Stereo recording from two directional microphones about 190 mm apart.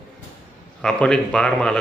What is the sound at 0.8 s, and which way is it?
Speech, 5° left (ahead or behind).